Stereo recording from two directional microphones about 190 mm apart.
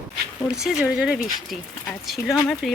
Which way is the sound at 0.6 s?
5° right (ahead or behind).